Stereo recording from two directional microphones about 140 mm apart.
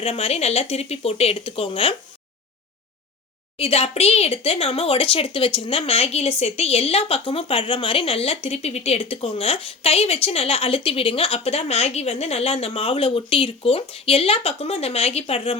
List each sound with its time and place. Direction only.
0.0 s speech: 45° left (ahead or behind)
3.6 s speech: 45° left (ahead or behind)